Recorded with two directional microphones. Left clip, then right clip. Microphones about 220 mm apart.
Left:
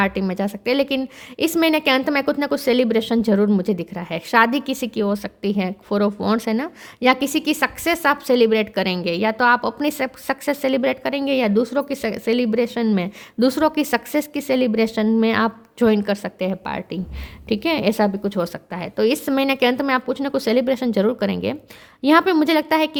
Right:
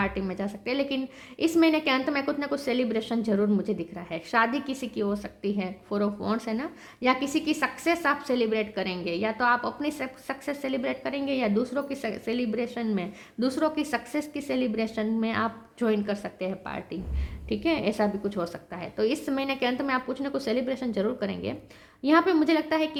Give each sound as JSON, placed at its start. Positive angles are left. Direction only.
{"t": 0.0, "sound": "a woman's voice", "side_deg": 45}